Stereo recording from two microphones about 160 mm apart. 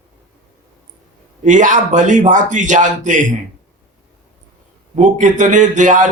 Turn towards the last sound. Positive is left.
turn(degrees=-50)  # may be behind; listen again after turning